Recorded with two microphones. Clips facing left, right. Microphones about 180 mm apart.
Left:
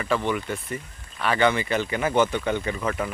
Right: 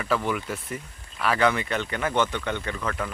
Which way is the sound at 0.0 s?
Centre (ahead or behind).